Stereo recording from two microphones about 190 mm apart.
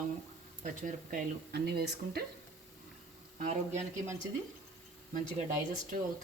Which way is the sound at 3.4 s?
35° right (ahead or behind).